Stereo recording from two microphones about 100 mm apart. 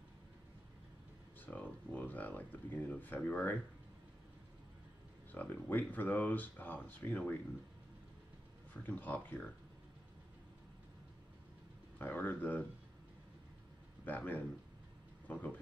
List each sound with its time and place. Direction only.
1.4 s speech: 15° left (ahead or behind)
5.3 s speech: 15° left (ahead or behind)
8.8 s speech: 15° left (ahead or behind)
12.0 s speech: 20° left (ahead or behind)
14.0 s speech: 15° left (ahead or behind)